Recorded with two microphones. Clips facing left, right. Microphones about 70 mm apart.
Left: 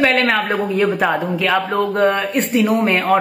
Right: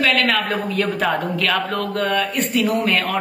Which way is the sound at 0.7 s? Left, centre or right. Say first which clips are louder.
Left 4 dB; centre.